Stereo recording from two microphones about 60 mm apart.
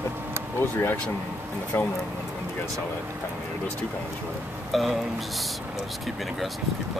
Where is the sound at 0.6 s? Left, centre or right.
Left.